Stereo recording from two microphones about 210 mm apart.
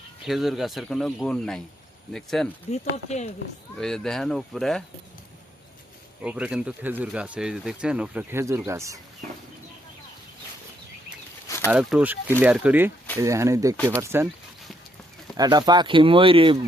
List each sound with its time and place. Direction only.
0.3 s speech: centre (ahead or behind)
3.1 s speech: 35° left (ahead or behind)
3.8 s speech: centre (ahead or behind)
6.2 s speech: 5° right (ahead or behind)
11.4 s a sound: 10° left (ahead or behind)
11.7 s speech: 5° right (ahead or behind)
15.4 s speech: 20° right (ahead or behind)